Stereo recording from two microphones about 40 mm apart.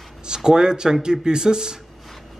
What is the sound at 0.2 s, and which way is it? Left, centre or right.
Speech, centre.